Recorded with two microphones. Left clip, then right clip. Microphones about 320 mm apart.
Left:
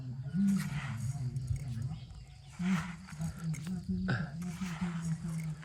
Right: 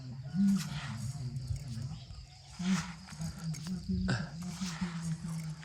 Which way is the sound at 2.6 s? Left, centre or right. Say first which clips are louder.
Even; centre.